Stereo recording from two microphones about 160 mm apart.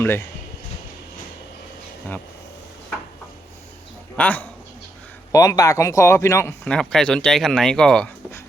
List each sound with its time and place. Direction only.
4.2 s speech: 10° left (ahead or behind)
5.3 s speech: 20° left (ahead or behind); by 8.1 s 5° left (ahead or behind)